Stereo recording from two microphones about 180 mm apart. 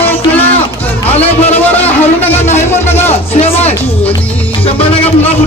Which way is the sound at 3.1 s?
35° left (ahead or behind).